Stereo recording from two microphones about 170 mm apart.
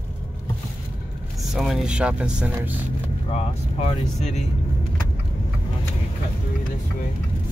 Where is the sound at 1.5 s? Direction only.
5° right (ahead or behind).